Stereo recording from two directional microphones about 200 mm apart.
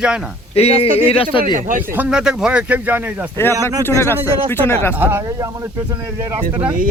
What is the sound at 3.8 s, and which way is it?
Speech, 10° left (ahead or behind).